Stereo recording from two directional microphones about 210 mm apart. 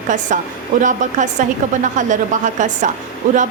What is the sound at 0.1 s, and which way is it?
A woman's voice, 35° right (ahead or behind).